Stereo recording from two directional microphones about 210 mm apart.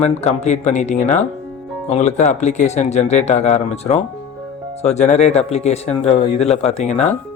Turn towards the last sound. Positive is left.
turn(degrees=35)  # may be behind; listen again after turning